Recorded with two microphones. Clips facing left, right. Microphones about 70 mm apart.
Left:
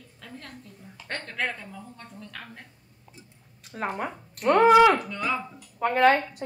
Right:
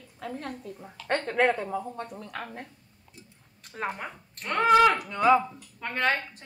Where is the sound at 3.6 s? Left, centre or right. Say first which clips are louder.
Left 3 dB; centre.